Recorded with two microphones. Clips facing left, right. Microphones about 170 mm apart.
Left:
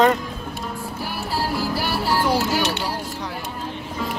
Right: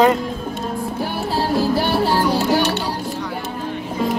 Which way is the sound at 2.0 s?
15° right (ahead or behind).